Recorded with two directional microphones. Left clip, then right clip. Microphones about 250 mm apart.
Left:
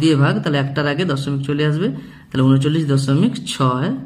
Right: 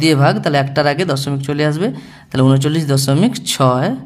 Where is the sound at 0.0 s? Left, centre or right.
Right.